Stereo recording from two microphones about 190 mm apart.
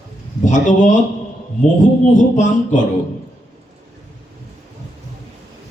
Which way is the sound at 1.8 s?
40° left (ahead or behind).